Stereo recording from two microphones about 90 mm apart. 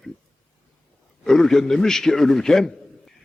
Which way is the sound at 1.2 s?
5° left (ahead or behind).